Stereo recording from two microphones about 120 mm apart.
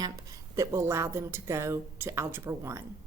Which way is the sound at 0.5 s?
25° right (ahead or behind).